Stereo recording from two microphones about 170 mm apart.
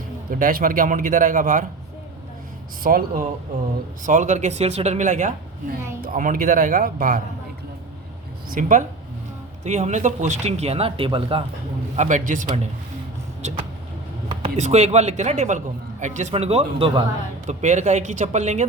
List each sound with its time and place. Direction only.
0.3 s speech: 55° right (ahead or behind)
2.8 s speech: 55° right (ahead or behind)
4.0 s speech: 45° right (ahead or behind)
8.4 s speech: 50° right (ahead or behind)
9.6 s a man's voice: 40° right (ahead or behind)
11.9 s speech: 45° right (ahead or behind)
14.4 s a man's voice: 40° right (ahead or behind)
17.4 s speech: 45° right (ahead or behind)